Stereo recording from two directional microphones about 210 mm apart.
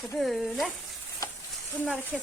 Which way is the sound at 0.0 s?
Centre (ahead or behind).